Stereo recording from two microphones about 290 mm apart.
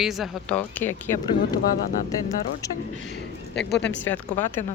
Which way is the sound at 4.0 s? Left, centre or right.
Centre.